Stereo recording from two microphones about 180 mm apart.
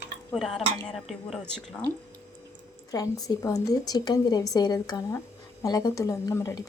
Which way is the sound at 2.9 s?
20° left (ahead or behind).